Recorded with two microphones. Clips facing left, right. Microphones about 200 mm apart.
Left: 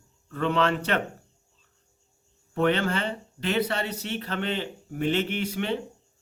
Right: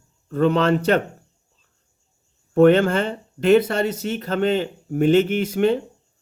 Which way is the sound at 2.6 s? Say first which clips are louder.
Right 10 dB; 45° right (ahead or behind).